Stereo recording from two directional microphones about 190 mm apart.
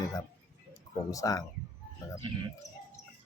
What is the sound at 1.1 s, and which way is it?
Speech, 20° left (ahead or behind).